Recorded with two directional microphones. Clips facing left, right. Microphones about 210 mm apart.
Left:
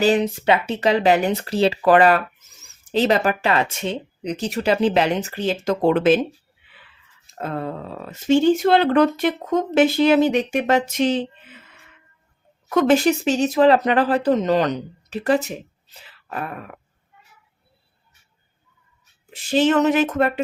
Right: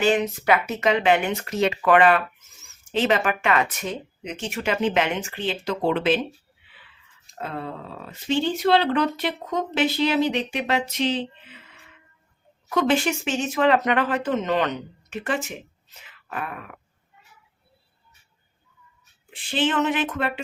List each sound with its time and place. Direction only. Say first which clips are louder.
0.0 s speech: left 3 dB; 35° left (ahead or behind)
7.3 s speech: left 5 dB; 45° left (ahead or behind)
12.6 s speech: left 5 dB; 45° left (ahead or behind)
19.3 s speech: left 7 dB; 40° left (ahead or behind)